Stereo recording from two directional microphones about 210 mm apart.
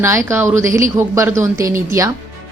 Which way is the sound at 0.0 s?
15° right (ahead or behind).